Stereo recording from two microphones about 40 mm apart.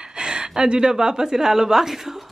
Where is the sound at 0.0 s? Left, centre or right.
Centre.